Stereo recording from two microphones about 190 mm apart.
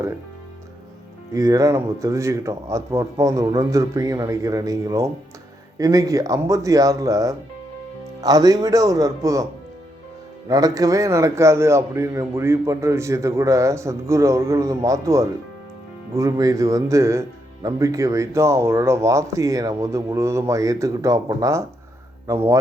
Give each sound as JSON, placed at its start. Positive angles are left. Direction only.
{"t": 1.3, "sound": "speech", "side_deg": -15}
{"t": 10.5, "sound": "speech", "side_deg": -20}